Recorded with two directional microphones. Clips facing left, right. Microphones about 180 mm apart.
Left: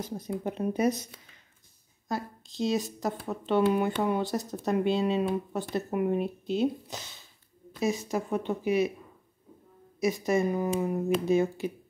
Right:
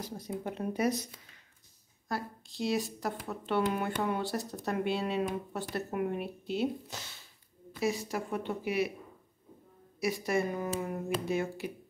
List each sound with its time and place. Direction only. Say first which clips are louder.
0.0 s speech: left 5 dB; 20° left (ahead or behind)
2.0 s speech: left 3 dB; 20° left (ahead or behind)
9.9 s speech: left 4 dB; 20° left (ahead or behind)